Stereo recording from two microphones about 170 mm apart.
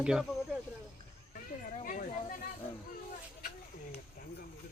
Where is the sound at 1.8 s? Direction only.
50° left (ahead or behind).